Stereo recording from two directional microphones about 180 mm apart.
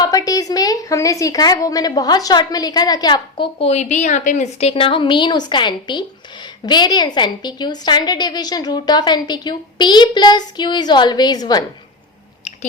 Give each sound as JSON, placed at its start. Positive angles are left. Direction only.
{"t": 0.0, "sound": "a woman's voice", "side_deg": 20}